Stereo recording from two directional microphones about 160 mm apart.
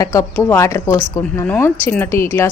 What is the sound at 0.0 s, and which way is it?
A woman's voice, 20° left (ahead or behind).